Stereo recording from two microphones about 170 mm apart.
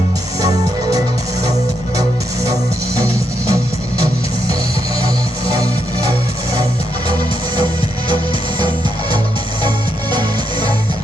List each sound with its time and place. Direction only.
0.4 s music: 20° right (ahead or behind)
2.5 s music: 20° right (ahead or behind)
9.6 s music: 25° right (ahead or behind)